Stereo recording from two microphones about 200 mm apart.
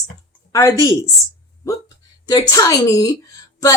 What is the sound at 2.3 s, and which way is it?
Speech, 15° left (ahead or behind).